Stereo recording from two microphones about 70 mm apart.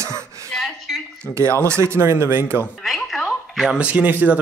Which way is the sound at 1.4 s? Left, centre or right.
Right.